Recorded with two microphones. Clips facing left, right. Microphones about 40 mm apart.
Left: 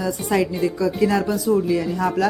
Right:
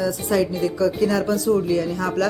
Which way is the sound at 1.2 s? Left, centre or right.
Centre.